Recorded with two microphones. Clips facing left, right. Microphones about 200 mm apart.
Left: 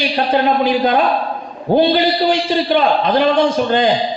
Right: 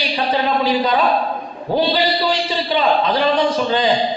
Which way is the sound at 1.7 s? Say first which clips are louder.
Left 5 dB; 50° left (ahead or behind).